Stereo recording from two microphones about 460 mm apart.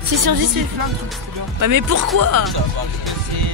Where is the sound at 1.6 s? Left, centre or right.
Right.